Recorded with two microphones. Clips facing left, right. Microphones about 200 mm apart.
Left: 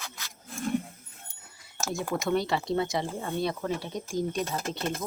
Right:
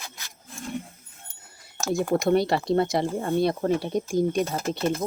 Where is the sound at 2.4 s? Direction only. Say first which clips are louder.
Right 5 dB; 65° right (ahead or behind).